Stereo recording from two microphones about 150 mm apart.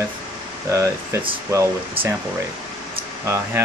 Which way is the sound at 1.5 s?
20° right (ahead or behind).